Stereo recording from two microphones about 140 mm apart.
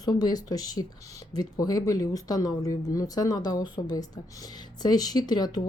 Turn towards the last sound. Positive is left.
turn(degrees=30)  # may be behind; listen again after turning